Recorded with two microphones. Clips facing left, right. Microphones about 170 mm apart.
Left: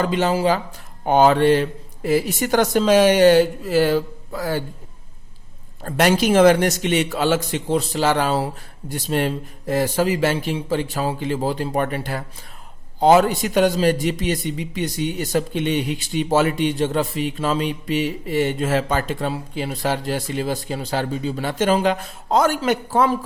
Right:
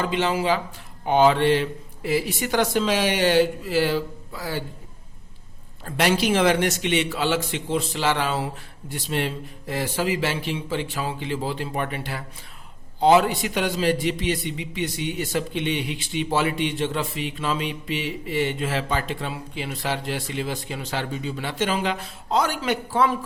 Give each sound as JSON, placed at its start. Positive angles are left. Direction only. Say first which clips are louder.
{"t": 0.0, "sound": "a man's voice", "louder": "left 4 dB", "side_deg": 40}
{"t": 5.8, "sound": "a man's voice", "louder": "left 4 dB", "side_deg": 45}